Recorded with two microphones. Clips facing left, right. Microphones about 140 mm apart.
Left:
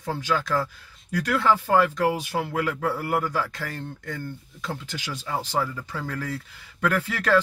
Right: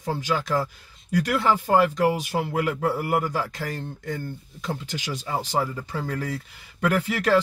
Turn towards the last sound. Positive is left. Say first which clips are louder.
# right 1 dB
turn(degrees=-15)  # may be behind; listen again after turning